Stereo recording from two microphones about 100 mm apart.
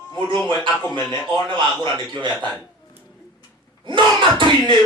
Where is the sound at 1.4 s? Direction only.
50° right (ahead or behind).